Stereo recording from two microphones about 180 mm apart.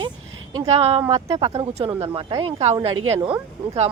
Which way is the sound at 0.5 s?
35° right (ahead or behind).